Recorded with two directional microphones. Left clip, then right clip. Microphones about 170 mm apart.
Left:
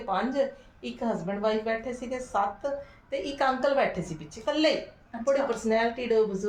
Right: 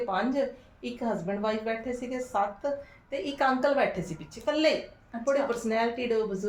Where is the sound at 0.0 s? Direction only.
15° left (ahead or behind).